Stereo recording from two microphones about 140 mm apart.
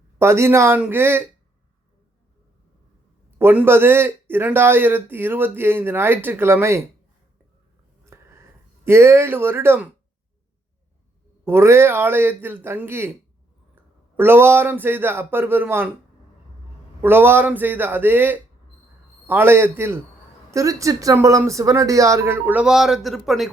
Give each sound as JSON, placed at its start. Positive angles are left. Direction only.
{"t": 0.2, "sound": "a man's voice", "side_deg": -20}
{"t": 3.3, "sound": "a man's voice", "side_deg": -15}
{"t": 8.0, "sound": "a sound", "side_deg": -20}
{"t": 11.4, "sound": "a man's voice", "side_deg": -15}
{"t": 14.2, "sound": "a man's voice", "side_deg": -15}
{"t": 17.0, "sound": "a man's voice", "side_deg": -15}